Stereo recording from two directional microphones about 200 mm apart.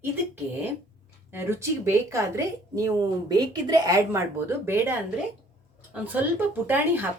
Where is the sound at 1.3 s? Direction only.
15° right (ahead or behind).